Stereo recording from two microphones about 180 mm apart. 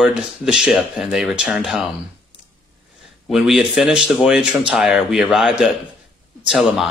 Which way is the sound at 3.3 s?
Centre (ahead or behind).